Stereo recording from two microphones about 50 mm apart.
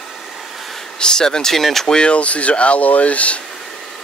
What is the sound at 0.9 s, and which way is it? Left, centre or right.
Speech, centre.